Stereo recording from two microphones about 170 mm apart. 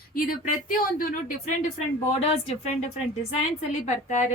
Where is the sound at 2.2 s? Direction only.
35° left (ahead or behind).